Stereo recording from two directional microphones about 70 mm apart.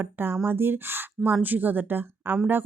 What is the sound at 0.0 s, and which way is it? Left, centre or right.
A woman's voice, right.